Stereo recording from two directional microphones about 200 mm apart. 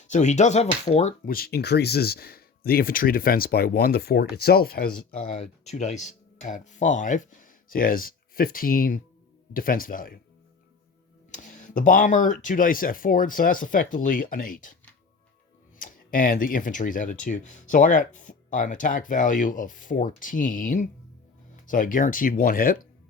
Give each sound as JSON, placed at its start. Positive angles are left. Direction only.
{"t": 0.1, "sound": "speech", "side_deg": 35}
{"t": 11.3, "sound": "speech", "side_deg": 40}
{"t": 15.8, "sound": "speech", "side_deg": 45}